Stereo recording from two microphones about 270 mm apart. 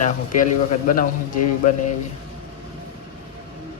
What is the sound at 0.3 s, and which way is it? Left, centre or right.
Speech, left.